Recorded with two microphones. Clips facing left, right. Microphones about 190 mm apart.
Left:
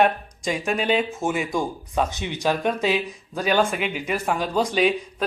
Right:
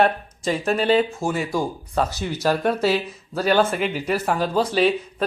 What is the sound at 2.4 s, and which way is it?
Speech, 5° right (ahead or behind).